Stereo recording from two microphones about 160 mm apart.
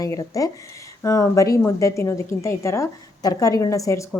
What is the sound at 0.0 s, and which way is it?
A woman's voice, 20° left (ahead or behind).